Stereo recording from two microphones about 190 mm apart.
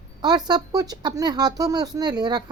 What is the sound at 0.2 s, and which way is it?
Speech, 20° right (ahead or behind).